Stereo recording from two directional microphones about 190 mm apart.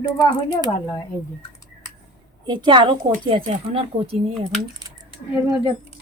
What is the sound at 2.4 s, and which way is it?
Speech, 25° right (ahead or behind).